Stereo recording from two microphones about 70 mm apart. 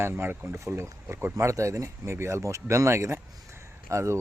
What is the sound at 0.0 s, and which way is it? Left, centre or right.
Speech, right.